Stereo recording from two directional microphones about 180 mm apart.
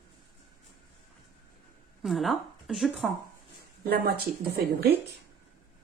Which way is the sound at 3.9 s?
60° right (ahead or behind).